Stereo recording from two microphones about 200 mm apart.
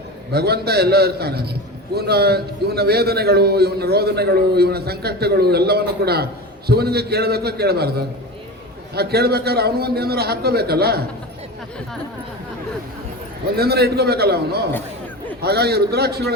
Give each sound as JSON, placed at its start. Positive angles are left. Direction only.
{"t": 0.3, "sound": "a man's voice", "side_deg": -55}
{"t": 13.6, "sound": "a man's voice", "side_deg": -55}